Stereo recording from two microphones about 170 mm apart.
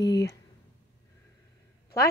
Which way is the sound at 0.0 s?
80° left.